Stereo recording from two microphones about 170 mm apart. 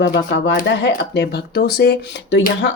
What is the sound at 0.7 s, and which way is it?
Speech, 90° left.